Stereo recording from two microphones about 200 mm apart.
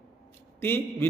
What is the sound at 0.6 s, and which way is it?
Speech, 10° left (ahead or behind).